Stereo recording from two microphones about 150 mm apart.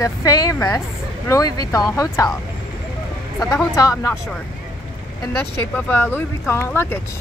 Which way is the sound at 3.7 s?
25° left (ahead or behind).